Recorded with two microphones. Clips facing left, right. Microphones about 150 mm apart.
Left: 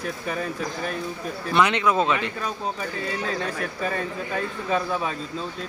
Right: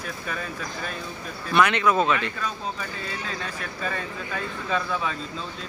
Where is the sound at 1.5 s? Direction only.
20° left (ahead or behind).